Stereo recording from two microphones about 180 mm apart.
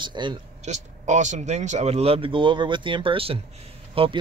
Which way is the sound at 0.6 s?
40° right (ahead or behind).